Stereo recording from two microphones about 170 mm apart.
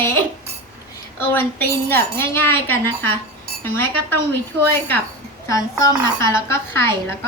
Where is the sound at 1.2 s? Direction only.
10° left (ahead or behind).